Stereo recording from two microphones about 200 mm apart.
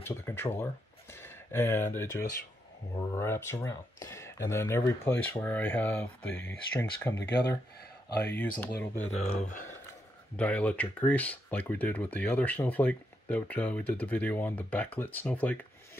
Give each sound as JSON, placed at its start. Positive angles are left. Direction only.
{"t": 0.0, "sound": "a sound", "side_deg": 10}
{"t": 2.0, "sound": "speech", "side_deg": 15}
{"t": 7.2, "sound": "speech", "side_deg": 55}
{"t": 8.3, "sound": "speech", "side_deg": 10}
{"t": 9.2, "sound": "speech", "side_deg": 40}
{"t": 10.3, "sound": "speech", "side_deg": 5}